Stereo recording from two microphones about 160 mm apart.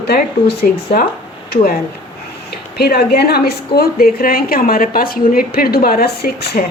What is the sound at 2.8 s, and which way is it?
A woman's voice, 75° left (ahead or behind).